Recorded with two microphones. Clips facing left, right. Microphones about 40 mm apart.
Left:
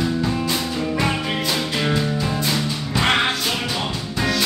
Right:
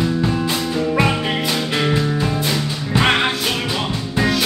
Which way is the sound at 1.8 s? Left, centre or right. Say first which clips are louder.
Right 4 dB; right.